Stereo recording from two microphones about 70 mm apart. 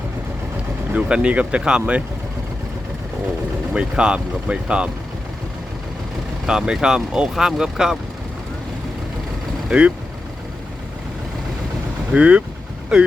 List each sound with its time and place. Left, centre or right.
0.9 s speech: centre
3.8 s speech: centre
6.4 s speech: centre
9.6 s speech: centre
12.1 s speech: centre